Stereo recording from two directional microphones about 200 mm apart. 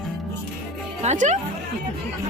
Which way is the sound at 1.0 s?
35° right (ahead or behind).